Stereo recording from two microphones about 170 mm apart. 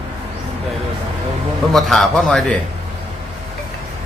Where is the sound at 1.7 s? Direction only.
Centre (ahead or behind).